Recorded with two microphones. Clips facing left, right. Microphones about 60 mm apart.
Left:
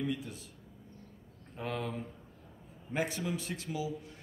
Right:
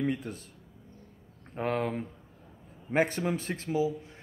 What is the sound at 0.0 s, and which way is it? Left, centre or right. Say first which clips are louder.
Speech: right 5 dB; right.